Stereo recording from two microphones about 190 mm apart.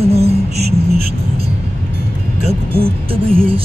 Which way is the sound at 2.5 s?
30° right (ahead or behind).